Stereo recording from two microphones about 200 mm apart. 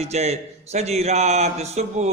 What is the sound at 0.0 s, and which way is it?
Speech, 30° right (ahead or behind).